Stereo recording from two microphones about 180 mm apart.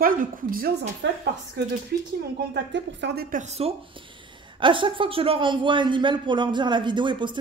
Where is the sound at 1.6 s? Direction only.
70° right (ahead or behind).